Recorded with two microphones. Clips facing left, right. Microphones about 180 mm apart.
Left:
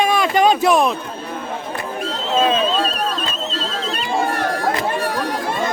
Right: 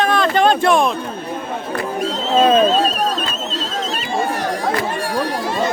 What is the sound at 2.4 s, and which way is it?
Speech, 45° right (ahead or behind).